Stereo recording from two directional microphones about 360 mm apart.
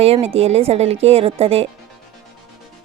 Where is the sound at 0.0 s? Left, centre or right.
Centre.